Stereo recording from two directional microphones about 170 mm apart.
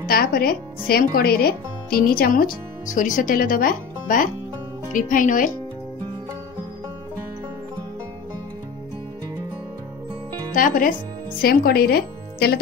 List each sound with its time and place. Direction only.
0.1 s speech: 60° left (ahead or behind)
10.5 s speech: 55° left (ahead or behind)
11.4 s speech: 65° left (ahead or behind)